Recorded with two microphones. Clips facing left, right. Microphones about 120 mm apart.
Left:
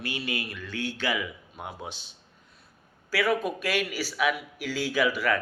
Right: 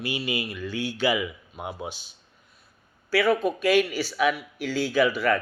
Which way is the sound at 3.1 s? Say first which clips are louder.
Right 4 dB; 10° left (ahead or behind).